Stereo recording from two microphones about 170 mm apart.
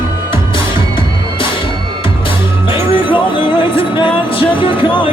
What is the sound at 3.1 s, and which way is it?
Music, 30° left (ahead or behind).